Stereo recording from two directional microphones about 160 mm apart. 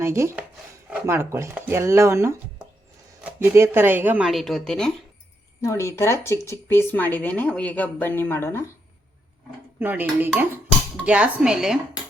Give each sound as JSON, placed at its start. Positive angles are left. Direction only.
{"t": 0.0, "sound": "speech", "side_deg": -15}
{"t": 4.3, "sound": "speech", "side_deg": 0}
{"t": 5.6, "sound": "speech", "side_deg": 15}
{"t": 9.7, "sound": "speech", "side_deg": -10}